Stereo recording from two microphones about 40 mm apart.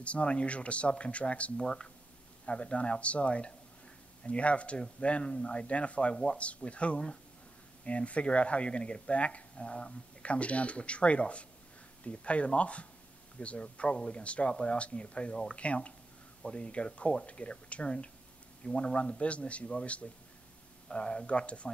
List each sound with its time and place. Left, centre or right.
0.0 s speech: left
1.6 s speech: centre
2.6 s speech: left